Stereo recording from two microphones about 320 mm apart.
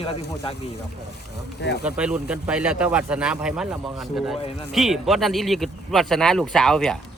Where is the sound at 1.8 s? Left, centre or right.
Centre.